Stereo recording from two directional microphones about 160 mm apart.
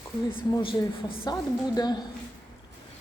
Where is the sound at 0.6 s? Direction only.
30° left (ahead or behind).